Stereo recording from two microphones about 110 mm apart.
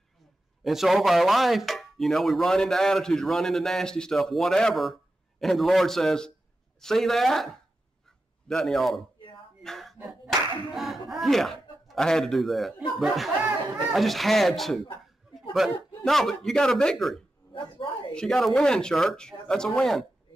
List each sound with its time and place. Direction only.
0.7 s speech: centre (ahead or behind)
9.6 s a sound: 5° left (ahead or behind)
10.0 s clapping: centre (ahead or behind)
13.0 s speech: centre (ahead or behind)
13.4 s chatter: 15° right (ahead or behind)
13.9 s speech: centre (ahead or behind)
17.8 s a sound: 50° left (ahead or behind)
18.1 s speech: 5° left (ahead or behind)